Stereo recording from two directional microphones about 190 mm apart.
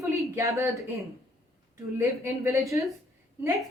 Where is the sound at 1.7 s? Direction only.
15° right (ahead or behind).